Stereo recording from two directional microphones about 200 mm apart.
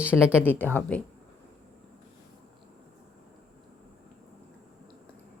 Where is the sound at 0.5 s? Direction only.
10° left (ahead or behind).